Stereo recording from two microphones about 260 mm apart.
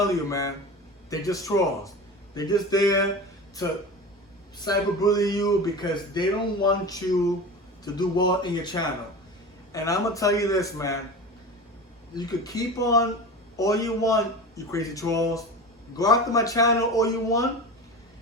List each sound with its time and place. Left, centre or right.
0.0 s speech: centre
4.6 s speech: centre
12.1 s speech: centre